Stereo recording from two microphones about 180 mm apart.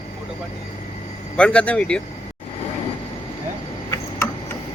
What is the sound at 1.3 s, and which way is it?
Speech, 5° left (ahead or behind).